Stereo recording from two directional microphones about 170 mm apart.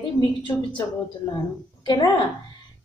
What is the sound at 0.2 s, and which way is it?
A woman's voice, 25° left (ahead or behind).